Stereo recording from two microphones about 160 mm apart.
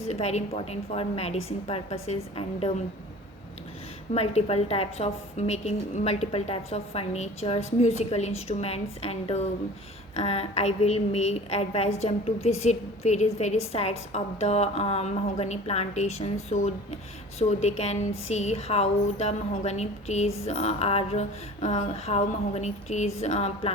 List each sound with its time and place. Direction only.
0.1 s a woman's voice: 45° left (ahead or behind)
4.1 s a woman's voice: 40° left (ahead or behind)
17.6 s a sound: 45° left (ahead or behind)